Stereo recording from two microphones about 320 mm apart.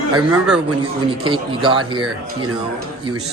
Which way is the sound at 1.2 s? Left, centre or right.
Centre.